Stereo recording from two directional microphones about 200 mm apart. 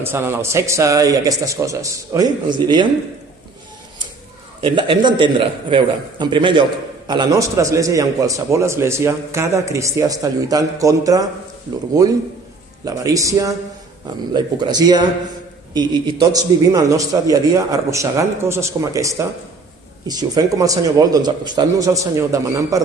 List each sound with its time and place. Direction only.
0.0 s a man's voice: 10° right (ahead or behind)
4.6 s a man's voice: 25° right (ahead or behind)
12.8 s a man's voice: 15° right (ahead or behind)